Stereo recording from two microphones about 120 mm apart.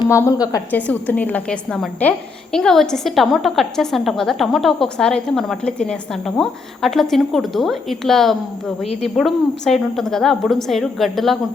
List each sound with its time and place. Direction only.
0.1 s a woman's voice: 25° left (ahead or behind)
0.7 s a woman's voice: 15° left (ahead or behind)